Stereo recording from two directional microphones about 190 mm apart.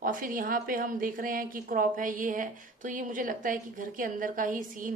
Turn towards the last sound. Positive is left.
turn(degrees=-45)  # may be behind; listen again after turning